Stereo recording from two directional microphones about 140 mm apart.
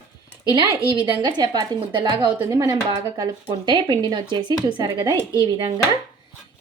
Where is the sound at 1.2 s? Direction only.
30° right (ahead or behind).